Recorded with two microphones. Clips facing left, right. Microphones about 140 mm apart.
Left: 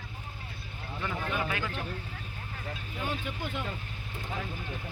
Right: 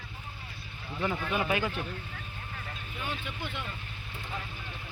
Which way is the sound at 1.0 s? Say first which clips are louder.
Right 3 dB; 15° right (ahead or behind).